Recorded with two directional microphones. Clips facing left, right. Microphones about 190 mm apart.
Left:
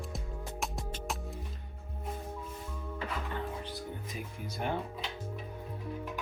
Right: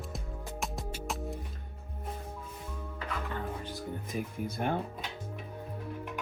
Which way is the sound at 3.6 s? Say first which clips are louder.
Right 2 dB; 50° right (ahead or behind).